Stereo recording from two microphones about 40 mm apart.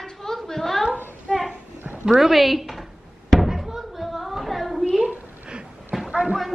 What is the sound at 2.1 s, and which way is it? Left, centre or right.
Speech, centre.